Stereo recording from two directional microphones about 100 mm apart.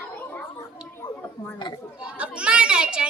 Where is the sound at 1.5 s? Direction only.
50° left (ahead or behind).